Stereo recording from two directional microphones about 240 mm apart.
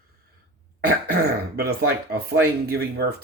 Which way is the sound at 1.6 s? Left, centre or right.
Right.